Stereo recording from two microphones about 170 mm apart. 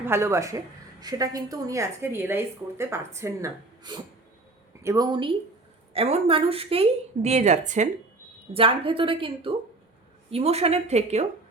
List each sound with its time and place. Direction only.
0.0 s a woman's voice: 15° right (ahead or behind); by 7.9 s 45° right (ahead or behind)
8.5 s a woman's voice: 30° right (ahead or behind)